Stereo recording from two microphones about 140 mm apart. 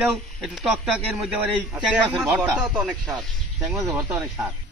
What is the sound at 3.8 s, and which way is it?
Speech, 15° right (ahead or behind).